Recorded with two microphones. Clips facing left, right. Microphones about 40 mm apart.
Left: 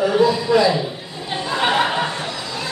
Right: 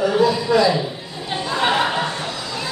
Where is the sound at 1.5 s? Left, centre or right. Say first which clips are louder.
Left 1 dB; centre.